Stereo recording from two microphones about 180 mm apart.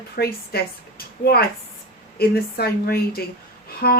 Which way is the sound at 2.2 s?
60° left (ahead or behind).